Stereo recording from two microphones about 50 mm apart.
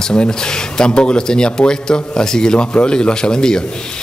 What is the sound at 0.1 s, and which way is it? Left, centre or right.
Speech, centre.